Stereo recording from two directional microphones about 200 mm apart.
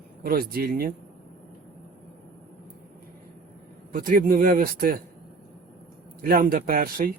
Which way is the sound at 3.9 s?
45° right (ahead or behind).